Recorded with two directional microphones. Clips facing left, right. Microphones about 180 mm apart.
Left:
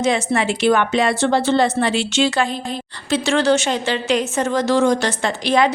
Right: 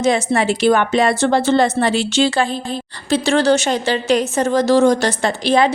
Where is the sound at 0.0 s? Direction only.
40° right (ahead or behind).